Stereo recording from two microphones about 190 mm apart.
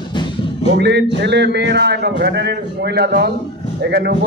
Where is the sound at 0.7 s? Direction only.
65° right (ahead or behind).